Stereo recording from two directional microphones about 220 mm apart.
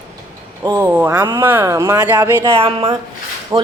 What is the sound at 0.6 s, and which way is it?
Speech, 10° right (ahead or behind).